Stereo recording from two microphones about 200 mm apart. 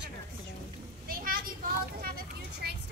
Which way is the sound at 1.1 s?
45° right (ahead or behind).